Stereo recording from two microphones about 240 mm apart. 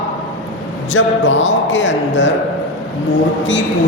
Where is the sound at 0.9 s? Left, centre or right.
Left.